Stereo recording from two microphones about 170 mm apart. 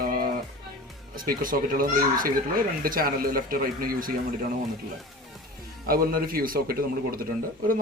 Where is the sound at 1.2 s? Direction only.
55° right (ahead or behind).